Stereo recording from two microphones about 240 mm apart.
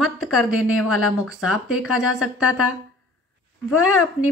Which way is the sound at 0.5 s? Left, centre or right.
Left.